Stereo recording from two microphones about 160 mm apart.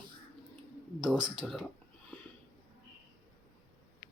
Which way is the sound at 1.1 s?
30° right (ahead or behind).